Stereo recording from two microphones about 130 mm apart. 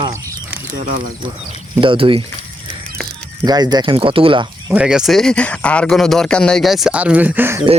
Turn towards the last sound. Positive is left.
turn(degrees=-15)  # may be behind; listen again after turning